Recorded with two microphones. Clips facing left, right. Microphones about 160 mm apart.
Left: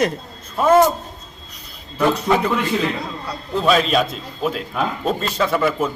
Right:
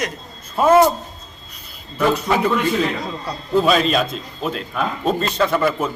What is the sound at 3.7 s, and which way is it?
Speech, centre (ahead or behind).